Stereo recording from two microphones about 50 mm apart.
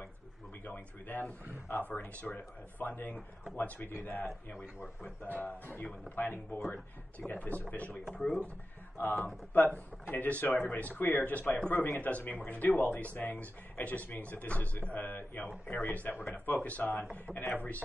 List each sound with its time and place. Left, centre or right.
0.7 s speech: left
1.7 s speech: left
8.0 s speech: centre
8.9 s speech: left